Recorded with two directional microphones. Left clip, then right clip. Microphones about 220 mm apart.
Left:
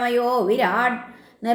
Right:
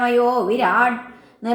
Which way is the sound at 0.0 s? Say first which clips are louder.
Right 3 dB; 35° left (ahead or behind).